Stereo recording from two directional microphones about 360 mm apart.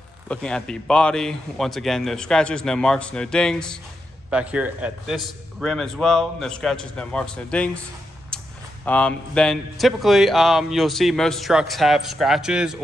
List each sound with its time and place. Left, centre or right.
0.3 s speech: centre
8.3 s a sound: centre
8.8 s speech: centre